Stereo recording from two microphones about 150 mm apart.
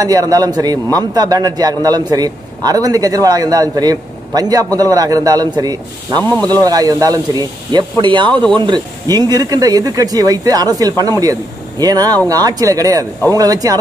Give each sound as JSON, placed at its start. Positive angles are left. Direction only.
{"t": 0.0, "sound": "a man's voice", "side_deg": -25}
{"t": 6.2, "sound": "speech", "side_deg": 10}
{"t": 6.6, "sound": "a man's voice", "side_deg": -25}